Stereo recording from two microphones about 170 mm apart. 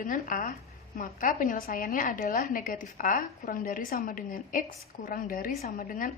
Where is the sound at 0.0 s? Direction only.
50° left (ahead or behind).